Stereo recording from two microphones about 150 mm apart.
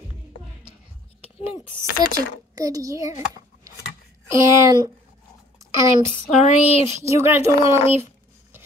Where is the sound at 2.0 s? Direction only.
25° right (ahead or behind).